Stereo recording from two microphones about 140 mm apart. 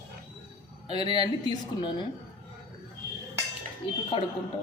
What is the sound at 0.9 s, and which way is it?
Speech, 30° left (ahead or behind).